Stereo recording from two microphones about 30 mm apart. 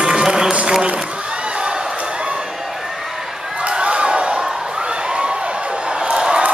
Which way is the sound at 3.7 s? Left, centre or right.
Right.